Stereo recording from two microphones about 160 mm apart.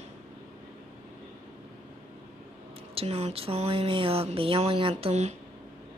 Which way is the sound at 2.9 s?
40° right (ahead or behind).